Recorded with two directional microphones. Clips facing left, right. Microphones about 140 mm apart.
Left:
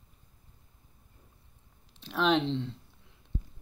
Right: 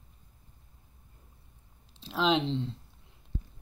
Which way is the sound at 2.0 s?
5° right (ahead or behind).